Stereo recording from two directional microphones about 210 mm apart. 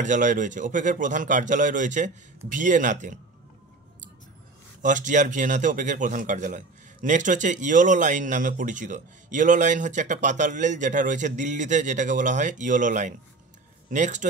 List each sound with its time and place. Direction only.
0.0 s a man's voice: 35° right (ahead or behind)
4.8 s a man's voice: 35° right (ahead or behind)